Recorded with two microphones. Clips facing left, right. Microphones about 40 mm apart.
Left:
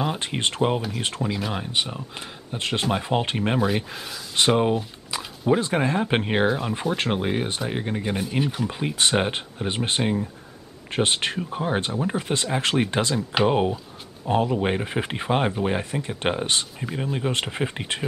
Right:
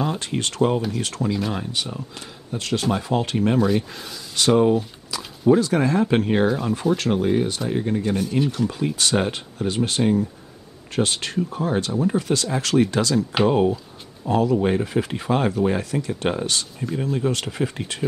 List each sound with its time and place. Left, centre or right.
0.0 s speech: left
1.3 s speech: centre
1.7 s speech: left
3.6 s speech: centre
4.4 s speech: left